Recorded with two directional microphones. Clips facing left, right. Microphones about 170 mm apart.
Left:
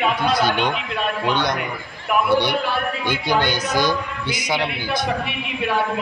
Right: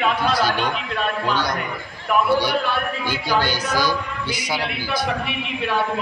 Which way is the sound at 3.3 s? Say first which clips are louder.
Left 1 dB; 5° right (ahead or behind).